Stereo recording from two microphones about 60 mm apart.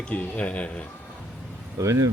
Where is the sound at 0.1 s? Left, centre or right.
Left.